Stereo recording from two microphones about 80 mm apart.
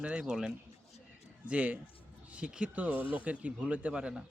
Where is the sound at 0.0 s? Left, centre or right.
Centre.